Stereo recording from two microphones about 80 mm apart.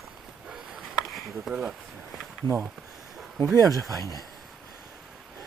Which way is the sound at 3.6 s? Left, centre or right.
Right.